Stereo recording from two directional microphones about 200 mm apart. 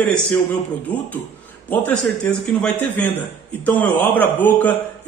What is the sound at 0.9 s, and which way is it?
A man's voice, 5° left (ahead or behind).